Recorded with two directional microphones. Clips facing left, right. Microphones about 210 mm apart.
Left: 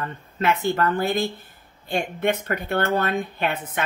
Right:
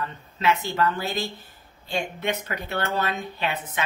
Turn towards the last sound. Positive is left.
turn(degrees=50)  # may be behind; listen again after turning